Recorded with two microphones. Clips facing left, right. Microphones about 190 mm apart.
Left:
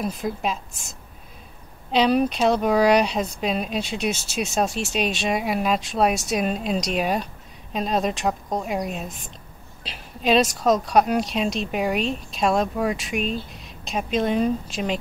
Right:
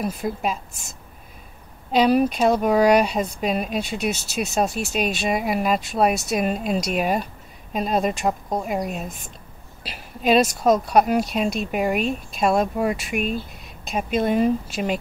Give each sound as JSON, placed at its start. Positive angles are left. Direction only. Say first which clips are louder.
{"t": 0.2, "sound": "speech", "louder": "right 1 dB", "side_deg": -5}
{"t": 2.0, "sound": "speech", "louder": "right 2 dB", "side_deg": -5}